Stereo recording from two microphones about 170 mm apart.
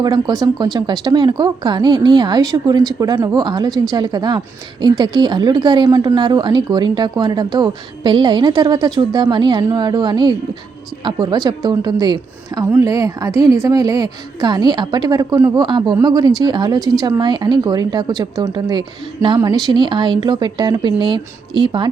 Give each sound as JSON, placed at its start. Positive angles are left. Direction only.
{"t": 0.0, "sound": "a woman's voice", "side_deg": -25}